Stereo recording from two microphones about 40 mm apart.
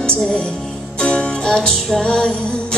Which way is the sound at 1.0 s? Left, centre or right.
Left.